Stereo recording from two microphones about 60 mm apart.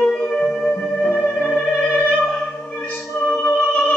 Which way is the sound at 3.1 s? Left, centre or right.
Left.